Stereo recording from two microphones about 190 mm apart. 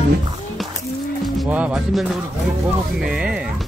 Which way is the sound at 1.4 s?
5° right (ahead or behind).